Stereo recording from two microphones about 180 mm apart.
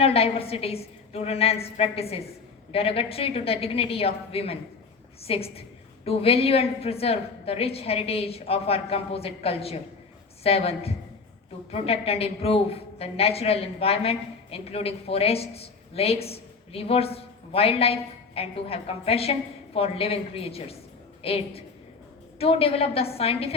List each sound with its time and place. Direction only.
0.0 s a woman's voice: 35° left (ahead or behind)